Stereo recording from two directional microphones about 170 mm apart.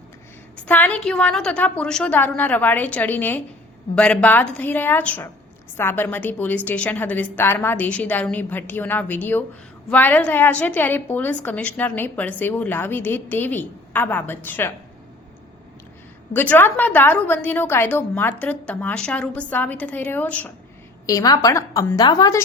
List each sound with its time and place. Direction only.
0.5 s a woman's voice: 10° left (ahead or behind)
16.3 s a woman's voice: 10° left (ahead or behind)
21.1 s a woman's voice: 20° left (ahead or behind)